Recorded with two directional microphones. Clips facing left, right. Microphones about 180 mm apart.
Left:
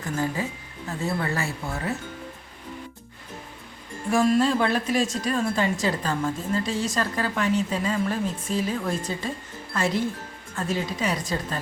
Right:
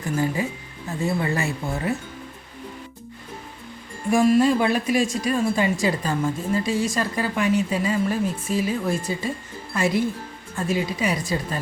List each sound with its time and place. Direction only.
0.4 s a woman's voice: 15° right (ahead or behind)
4.1 s a woman's voice: 15° right (ahead or behind)